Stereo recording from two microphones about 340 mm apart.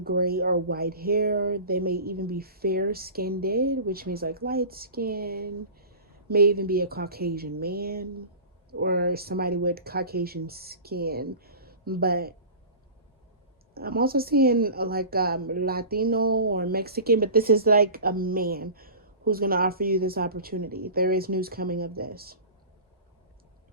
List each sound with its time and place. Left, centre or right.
0.0 s a woman's voice: right
13.7 s a woman's voice: right